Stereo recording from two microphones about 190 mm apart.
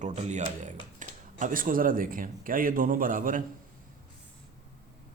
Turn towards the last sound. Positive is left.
turn(degrees=-45)  # may be behind; listen again after turning